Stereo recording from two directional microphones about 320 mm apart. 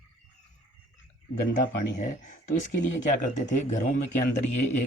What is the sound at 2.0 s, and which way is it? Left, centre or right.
Speech, left.